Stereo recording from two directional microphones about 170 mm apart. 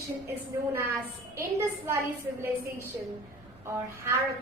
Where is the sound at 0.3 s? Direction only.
15° right (ahead or behind).